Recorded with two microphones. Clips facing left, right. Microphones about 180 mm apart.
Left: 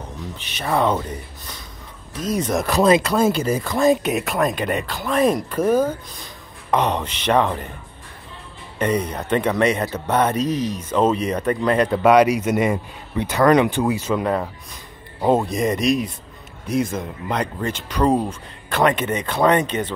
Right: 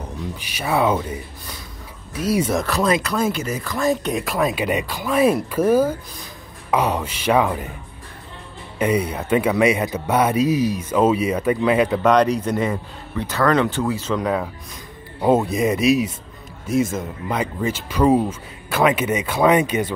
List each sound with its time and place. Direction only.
0.4 s a man's voice: 10° right (ahead or behind)
2.6 s speech: 20° left (ahead or behind)
4.0 s a man's voice: 5° left (ahead or behind)
8.7 s a man's voice: 10° right (ahead or behind)
12.0 s speech: 10° left (ahead or behind)
14.2 s a man's voice: centre (ahead or behind)